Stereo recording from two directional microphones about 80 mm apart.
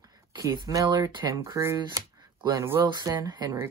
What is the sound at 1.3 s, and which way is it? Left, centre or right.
Speech, right.